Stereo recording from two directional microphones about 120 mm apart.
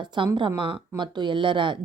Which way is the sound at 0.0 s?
40° right (ahead or behind).